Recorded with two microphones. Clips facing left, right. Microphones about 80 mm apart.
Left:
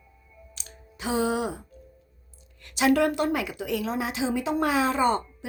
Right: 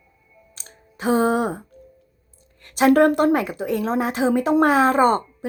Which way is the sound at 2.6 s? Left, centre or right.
Right.